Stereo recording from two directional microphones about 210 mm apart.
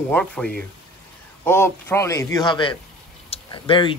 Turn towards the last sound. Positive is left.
turn(degrees=25)  # may be behind; listen again after turning